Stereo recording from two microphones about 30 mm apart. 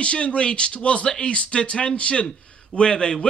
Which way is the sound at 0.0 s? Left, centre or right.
Left.